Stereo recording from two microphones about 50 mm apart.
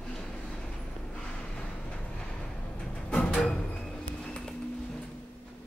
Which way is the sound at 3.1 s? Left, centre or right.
Left.